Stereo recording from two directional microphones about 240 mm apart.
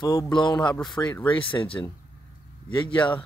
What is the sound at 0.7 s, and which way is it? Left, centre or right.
Speech, centre.